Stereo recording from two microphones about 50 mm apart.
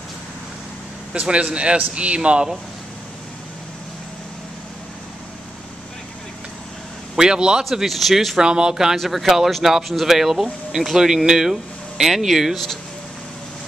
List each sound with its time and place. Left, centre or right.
1.2 s speech: right
7.2 s speech: centre
7.7 s speech: centre
8.4 s speech: centre
8.9 s speech: centre